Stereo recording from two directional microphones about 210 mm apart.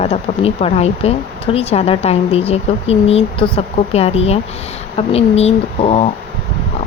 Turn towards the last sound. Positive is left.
turn(degrees=30)  # may be behind; listen again after turning